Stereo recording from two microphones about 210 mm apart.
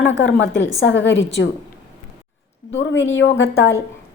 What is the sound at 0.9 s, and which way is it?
Speech, 60° left (ahead or behind).